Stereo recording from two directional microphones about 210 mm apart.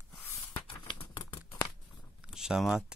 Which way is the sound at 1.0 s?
25° left (ahead or behind).